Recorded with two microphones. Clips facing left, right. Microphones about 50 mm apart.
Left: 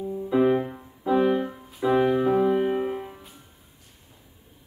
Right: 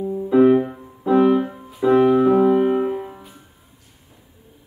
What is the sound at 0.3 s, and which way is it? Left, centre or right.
Music, centre.